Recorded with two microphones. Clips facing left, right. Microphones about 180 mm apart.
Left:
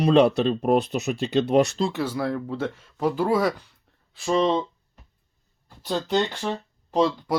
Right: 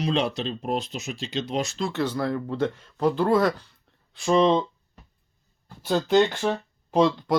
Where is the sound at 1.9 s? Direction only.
5° left (ahead or behind).